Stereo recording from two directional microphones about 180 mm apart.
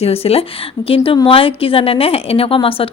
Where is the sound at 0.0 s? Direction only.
35° left (ahead or behind).